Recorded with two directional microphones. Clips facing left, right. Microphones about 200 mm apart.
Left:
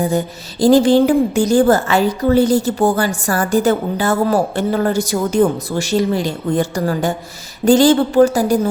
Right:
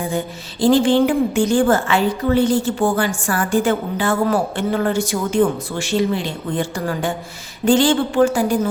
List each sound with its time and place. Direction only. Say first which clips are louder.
0.0 s a woman's voice: left 5 dB; 40° left (ahead or behind)